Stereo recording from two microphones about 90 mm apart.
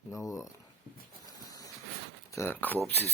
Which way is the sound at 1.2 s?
40° left (ahead or behind).